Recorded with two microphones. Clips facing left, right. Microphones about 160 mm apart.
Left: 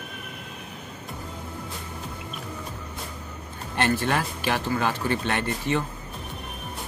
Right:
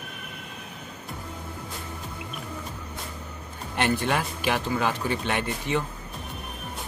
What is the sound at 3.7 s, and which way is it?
Speech, 15° right (ahead or behind).